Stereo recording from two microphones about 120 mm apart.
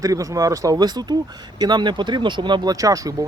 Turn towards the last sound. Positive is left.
turn(degrees=-30)  # may be behind; listen again after turning